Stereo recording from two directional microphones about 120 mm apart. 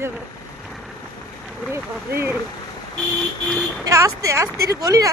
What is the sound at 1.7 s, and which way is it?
Speech, 20° right (ahead or behind).